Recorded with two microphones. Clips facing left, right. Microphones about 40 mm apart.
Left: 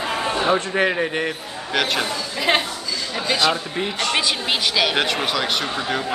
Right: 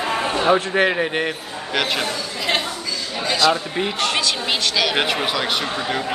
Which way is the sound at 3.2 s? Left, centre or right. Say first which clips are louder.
Right 2 dB; centre.